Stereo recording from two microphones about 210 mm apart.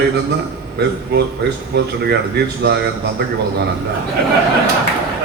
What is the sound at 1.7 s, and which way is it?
A man's voice, 50° right (ahead or behind).